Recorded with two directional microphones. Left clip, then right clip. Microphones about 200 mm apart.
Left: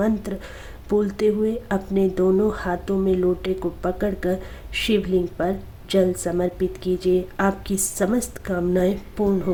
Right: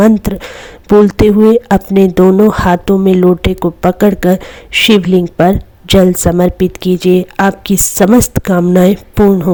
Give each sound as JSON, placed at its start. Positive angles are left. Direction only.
{"t": 0.0, "sound": "speech", "side_deg": -45}